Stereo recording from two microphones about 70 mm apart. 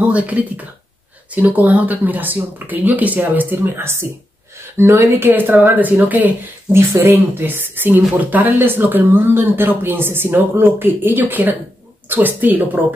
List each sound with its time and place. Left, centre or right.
0.0 s speech: right
5.2 s speech: right